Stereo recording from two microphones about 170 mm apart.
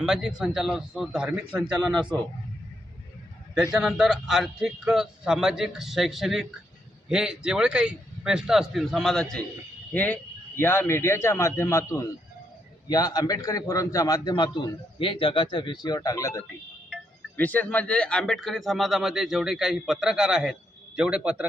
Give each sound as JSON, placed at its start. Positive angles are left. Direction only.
{"t": 0.0, "sound": "a man's voice", "side_deg": -5}
{"t": 3.6, "sound": "a man's voice", "side_deg": -5}